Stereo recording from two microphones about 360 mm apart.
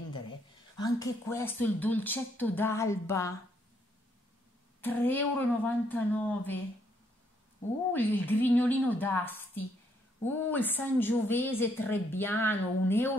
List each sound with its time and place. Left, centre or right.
0.7 s a woman's voice: centre
4.8 s a woman's voice: centre
7.9 s a woman's voice: centre